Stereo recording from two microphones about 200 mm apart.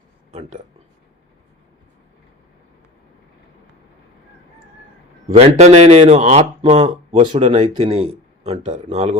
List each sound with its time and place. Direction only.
5.5 s speech: 35° right (ahead or behind)